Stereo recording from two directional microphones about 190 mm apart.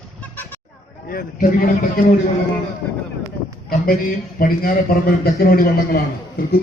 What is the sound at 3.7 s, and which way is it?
A man's voice, 50° left (ahead or behind).